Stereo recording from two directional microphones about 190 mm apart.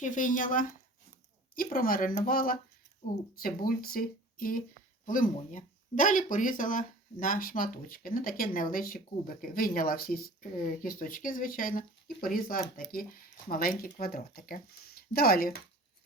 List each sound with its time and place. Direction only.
0.0 s speech: 45° left (ahead or behind)